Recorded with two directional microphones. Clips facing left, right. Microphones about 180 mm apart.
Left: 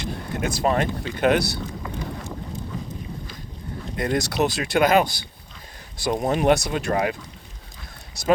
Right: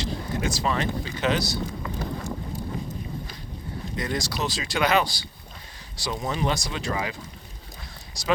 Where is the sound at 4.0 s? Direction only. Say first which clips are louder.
Left 7 dB; 60° left (ahead or behind).